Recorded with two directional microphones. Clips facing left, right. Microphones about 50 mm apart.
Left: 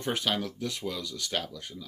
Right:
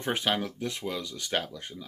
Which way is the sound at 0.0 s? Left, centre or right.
Right.